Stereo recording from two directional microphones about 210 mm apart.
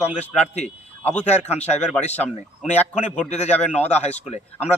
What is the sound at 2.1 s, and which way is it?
Speech, 5° left (ahead or behind).